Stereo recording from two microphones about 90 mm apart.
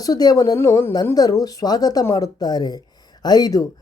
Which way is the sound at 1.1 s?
45° left (ahead or behind).